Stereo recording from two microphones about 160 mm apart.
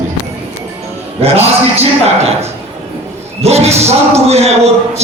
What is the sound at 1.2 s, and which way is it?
Speech, 40° right (ahead or behind).